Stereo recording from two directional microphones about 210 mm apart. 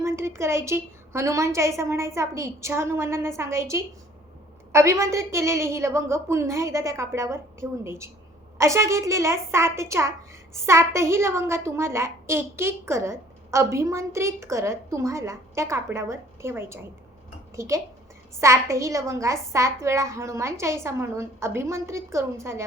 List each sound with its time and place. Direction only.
0.0 s a woman's voice: 10° right (ahead or behind)